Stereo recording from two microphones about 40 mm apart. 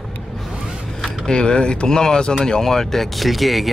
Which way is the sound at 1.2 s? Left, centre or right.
Left.